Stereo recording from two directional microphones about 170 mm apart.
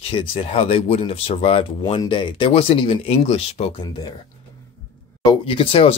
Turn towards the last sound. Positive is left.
turn(degrees=35)  # may be behind; listen again after turning